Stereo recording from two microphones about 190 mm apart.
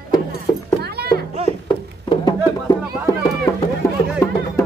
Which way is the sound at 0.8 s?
55° right (ahead or behind).